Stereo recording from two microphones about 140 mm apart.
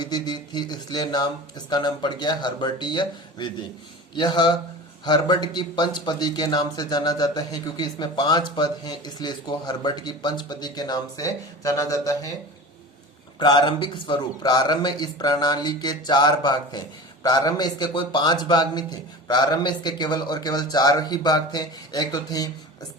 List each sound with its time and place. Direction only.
0.0 s speech: 30° left (ahead or behind)
13.4 s speech: 30° left (ahead or behind)